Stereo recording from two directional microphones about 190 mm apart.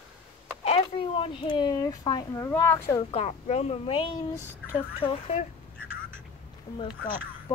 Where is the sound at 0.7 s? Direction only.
30° left (ahead or behind); by 3.1 s 15° left (ahead or behind).